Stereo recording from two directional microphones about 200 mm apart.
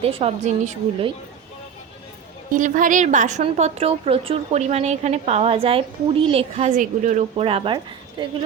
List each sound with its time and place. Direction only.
0.0 s a woman's voice: 30° right (ahead or behind)
2.5 s a woman's voice: 40° right (ahead or behind); by 8.3 s 25° right (ahead or behind)